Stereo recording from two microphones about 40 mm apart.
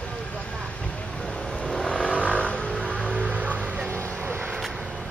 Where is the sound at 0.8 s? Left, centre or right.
Left.